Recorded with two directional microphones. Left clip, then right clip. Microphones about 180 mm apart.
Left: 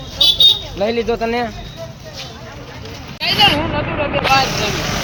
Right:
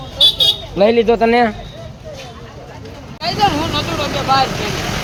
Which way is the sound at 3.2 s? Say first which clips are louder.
Left 3 dB; 90° right.